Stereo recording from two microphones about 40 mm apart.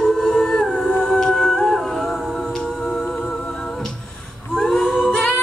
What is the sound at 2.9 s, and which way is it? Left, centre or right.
Music, left.